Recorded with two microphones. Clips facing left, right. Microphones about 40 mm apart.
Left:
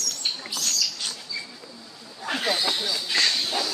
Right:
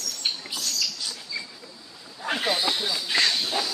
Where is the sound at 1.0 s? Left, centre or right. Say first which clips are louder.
Left 1 dB; left.